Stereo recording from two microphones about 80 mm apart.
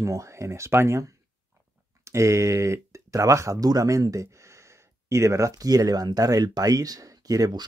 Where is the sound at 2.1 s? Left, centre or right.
Right.